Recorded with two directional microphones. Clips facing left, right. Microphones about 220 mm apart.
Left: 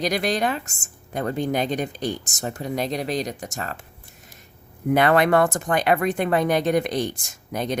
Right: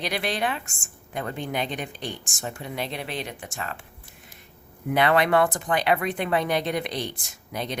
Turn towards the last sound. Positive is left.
turn(degrees=45)  # may be behind; listen again after turning